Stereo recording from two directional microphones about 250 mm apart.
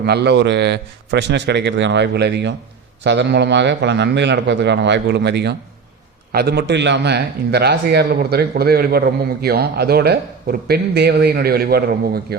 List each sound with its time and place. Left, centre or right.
0.0 s a man's voice: right